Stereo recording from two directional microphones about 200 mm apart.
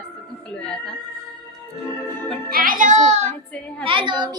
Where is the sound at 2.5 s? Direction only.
45° right (ahead or behind); by 4.3 s 25° right (ahead or behind).